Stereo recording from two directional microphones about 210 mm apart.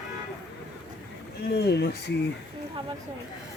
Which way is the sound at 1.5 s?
50° left (ahead or behind).